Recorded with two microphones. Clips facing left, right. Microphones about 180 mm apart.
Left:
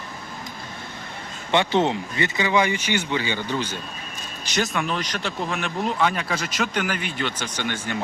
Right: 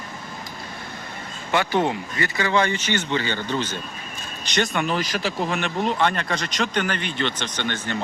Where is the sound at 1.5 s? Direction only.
25° left (ahead or behind).